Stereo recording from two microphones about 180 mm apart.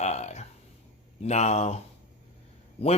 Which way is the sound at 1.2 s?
40° left (ahead or behind).